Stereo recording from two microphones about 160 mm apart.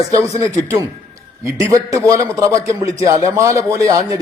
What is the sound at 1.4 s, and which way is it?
A man's voice, 20° right (ahead or behind).